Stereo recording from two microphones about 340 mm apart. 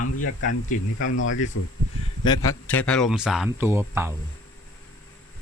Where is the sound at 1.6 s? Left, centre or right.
Left.